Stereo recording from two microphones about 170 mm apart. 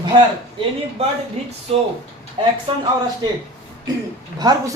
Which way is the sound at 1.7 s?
35° right (ahead or behind).